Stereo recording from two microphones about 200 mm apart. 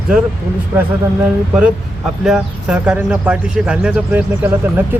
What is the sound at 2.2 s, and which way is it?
Speech, 5° right (ahead or behind).